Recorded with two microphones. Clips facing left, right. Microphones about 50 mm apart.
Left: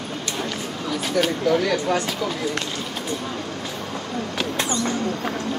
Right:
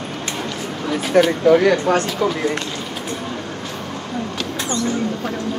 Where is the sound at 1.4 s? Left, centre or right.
Right.